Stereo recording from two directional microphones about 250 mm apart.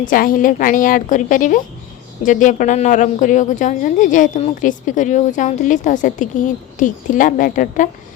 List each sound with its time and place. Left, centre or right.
0.0 s a woman's voice: left